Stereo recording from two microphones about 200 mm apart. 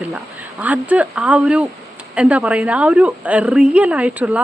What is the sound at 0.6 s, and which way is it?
A woman's voice, 5° right (ahead or behind).